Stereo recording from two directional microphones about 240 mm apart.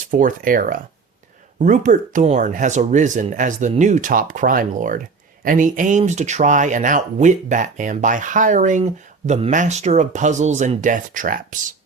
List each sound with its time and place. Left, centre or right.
0.1 s speech: right